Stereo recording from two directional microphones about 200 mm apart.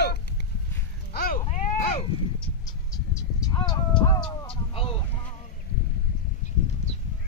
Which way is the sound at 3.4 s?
20° left (ahead or behind).